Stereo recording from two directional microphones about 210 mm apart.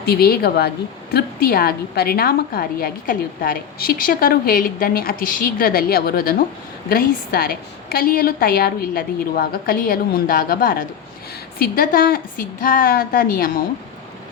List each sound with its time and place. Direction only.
0.0 s a woman's voice: 50° left (ahead or behind)